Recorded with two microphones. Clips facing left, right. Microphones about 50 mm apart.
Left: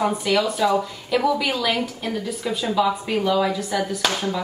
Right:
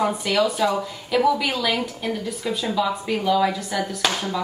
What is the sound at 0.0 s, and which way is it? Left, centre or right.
Speech, centre.